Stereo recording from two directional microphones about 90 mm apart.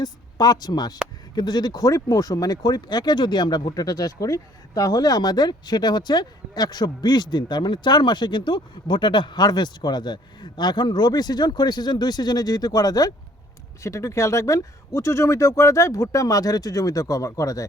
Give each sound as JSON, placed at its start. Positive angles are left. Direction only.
{"t": 0.0, "sound": "speech", "side_deg": 45}
{"t": 13.8, "sound": "speech", "side_deg": 35}